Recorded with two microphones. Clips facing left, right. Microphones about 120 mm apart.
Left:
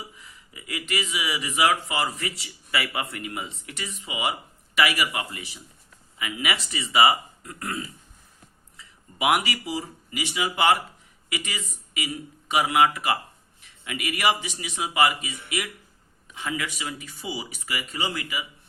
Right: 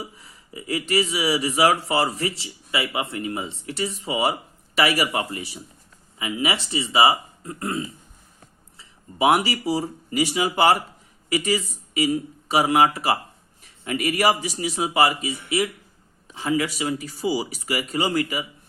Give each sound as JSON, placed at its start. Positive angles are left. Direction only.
{"t": 0.2, "sound": "speech", "side_deg": -35}